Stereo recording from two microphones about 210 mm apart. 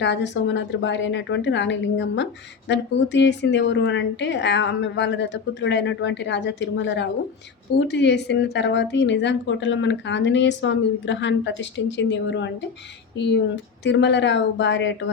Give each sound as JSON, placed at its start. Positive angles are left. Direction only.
{"t": 0.0, "sound": "a woman's voice", "side_deg": 55}